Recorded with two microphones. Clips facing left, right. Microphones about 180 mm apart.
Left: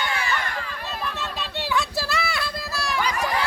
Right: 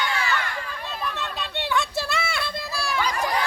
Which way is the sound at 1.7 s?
Centre (ahead or behind).